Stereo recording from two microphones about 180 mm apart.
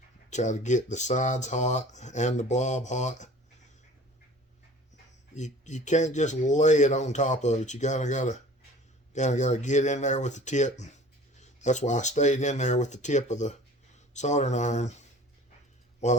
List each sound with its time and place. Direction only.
0.3 s speech: 40° left (ahead or behind)
5.3 s speech: 40° left (ahead or behind)